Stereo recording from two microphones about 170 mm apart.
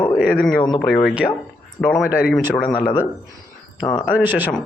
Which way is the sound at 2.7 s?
25° left (ahead or behind).